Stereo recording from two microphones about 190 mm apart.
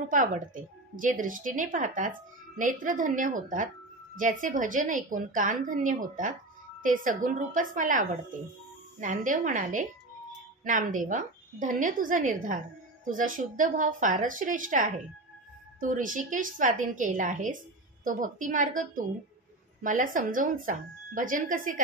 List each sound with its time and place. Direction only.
0.1 s speech: 45° right (ahead or behind)